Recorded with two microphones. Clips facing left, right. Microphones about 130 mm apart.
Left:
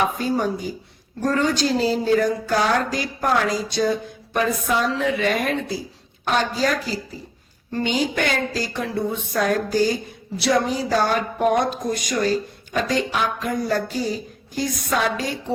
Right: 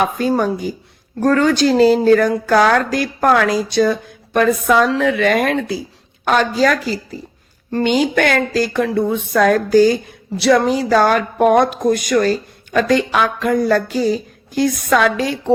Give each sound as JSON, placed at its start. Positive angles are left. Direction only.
{"t": 0.2, "sound": "speech", "side_deg": -80}
{"t": 7.7, "sound": "speech", "side_deg": -65}